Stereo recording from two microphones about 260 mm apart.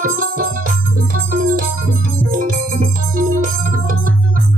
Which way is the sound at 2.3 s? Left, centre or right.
Right.